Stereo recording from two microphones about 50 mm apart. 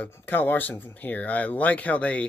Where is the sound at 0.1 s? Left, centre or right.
Left.